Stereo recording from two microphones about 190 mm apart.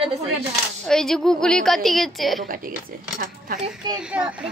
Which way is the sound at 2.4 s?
45° right (ahead or behind).